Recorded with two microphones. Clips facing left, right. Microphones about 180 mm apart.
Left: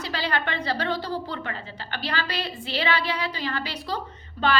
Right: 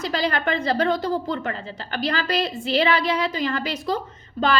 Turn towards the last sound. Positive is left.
turn(degrees=-45)  # may be behind; listen again after turning